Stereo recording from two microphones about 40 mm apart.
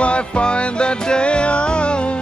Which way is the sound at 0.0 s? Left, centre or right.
Left.